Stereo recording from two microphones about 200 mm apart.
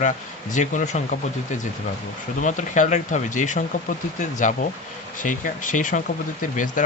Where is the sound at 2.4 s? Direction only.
40° left (ahead or behind).